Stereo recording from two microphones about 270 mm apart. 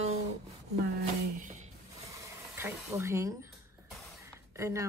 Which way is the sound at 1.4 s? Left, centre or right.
Right.